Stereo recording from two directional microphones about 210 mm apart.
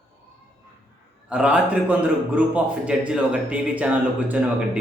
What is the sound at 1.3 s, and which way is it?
Speech, 5° right (ahead or behind).